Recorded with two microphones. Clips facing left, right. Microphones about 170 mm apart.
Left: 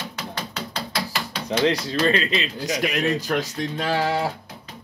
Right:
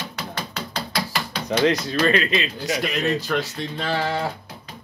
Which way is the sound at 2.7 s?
15° left (ahead or behind).